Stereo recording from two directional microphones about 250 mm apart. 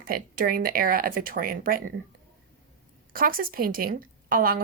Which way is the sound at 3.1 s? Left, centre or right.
Right.